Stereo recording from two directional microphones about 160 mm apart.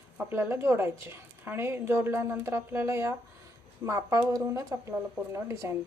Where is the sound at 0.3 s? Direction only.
15° right (ahead or behind).